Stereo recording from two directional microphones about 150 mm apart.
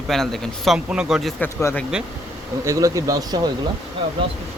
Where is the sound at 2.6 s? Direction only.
20° right (ahead or behind).